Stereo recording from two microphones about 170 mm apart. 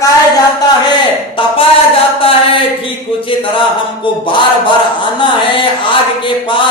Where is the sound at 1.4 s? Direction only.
30° left (ahead or behind).